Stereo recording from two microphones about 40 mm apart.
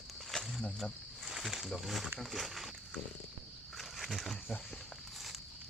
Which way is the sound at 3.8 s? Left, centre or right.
Centre.